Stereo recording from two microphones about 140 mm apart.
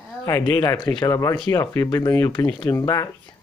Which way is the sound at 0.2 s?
25° left (ahead or behind).